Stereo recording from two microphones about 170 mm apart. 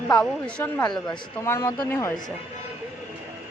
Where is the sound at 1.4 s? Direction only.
15° left (ahead or behind).